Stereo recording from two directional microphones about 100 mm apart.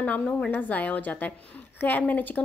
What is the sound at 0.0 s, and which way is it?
A woman's voice, 15° left (ahead or behind).